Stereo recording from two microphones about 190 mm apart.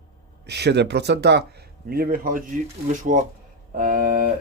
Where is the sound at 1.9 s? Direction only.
50° right (ahead or behind).